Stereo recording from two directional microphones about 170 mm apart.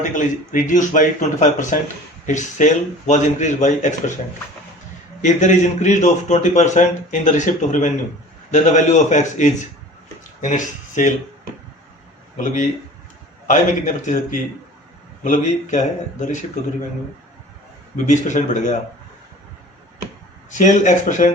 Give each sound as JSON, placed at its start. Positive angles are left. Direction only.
{"t": 0.1, "sound": "a man's voice", "side_deg": 50}
{"t": 5.2, "sound": "a man's voice", "side_deg": 45}
{"t": 13.5, "sound": "a man's voice", "side_deg": 50}
{"t": 17.9, "sound": "a man's voice", "side_deg": 45}
{"t": 20.5, "sound": "a man's voice", "side_deg": 45}